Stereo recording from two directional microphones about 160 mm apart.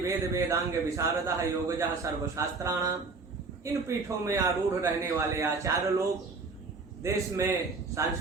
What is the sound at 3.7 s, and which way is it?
A man's voice, 20° right (ahead or behind).